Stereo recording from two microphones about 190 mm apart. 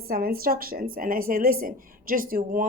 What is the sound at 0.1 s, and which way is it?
A woman's voice, 50° right (ahead or behind).